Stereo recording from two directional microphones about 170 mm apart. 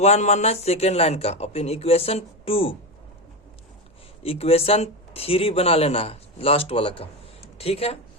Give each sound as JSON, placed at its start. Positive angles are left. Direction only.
{"t": 0.0, "sound": "speech", "side_deg": 40}
{"t": 4.2, "sound": "speech", "side_deg": 35}